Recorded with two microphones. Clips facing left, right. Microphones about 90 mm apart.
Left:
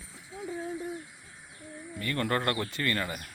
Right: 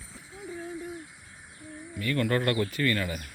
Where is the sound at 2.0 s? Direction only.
30° left (ahead or behind).